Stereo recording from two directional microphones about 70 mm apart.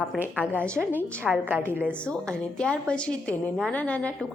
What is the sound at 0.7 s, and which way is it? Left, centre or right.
A woman's voice, right.